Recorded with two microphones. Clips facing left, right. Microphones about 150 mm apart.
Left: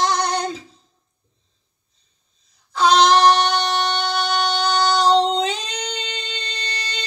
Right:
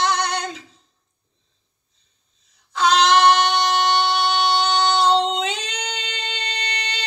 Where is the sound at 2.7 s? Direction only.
35° left (ahead or behind).